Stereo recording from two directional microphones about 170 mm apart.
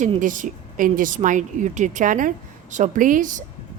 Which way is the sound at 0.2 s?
50° right (ahead or behind).